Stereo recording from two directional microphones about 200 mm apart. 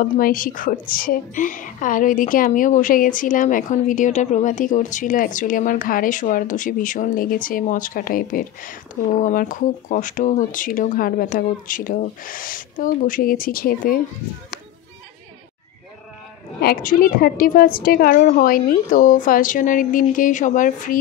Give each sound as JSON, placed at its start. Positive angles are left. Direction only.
{"t": 0.0, "sound": "a woman's voice", "side_deg": 45}
{"t": 16.6, "sound": "a woman's voice", "side_deg": 45}